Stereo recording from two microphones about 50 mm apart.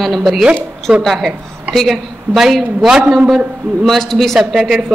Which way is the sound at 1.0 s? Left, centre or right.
Centre.